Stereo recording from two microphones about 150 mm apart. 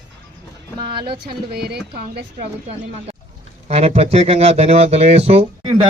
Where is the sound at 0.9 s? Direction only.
35° right (ahead or behind).